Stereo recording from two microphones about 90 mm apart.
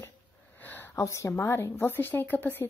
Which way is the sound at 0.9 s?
35° left (ahead or behind).